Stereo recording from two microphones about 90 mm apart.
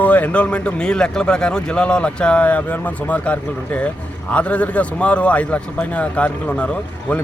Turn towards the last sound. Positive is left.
turn(degrees=15)  # may be behind; listen again after turning